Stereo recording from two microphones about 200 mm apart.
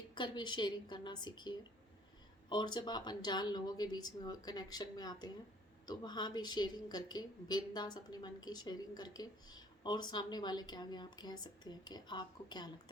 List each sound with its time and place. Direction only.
0.1 s a woman's voice: 25° left (ahead or behind)